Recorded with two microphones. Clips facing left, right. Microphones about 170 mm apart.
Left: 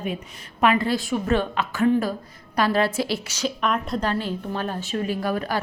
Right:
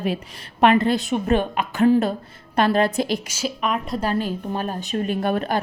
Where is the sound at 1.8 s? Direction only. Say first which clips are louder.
Right 4 dB; 30° right (ahead or behind).